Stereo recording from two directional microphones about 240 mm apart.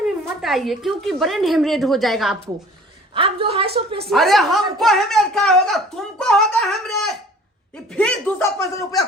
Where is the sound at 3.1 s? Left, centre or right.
Right.